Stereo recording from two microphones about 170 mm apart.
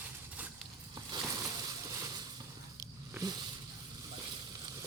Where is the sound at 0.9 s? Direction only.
25° right (ahead or behind).